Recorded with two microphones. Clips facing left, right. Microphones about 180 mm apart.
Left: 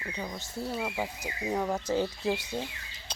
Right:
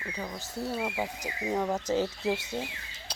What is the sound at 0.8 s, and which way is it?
Speech, 5° right (ahead or behind).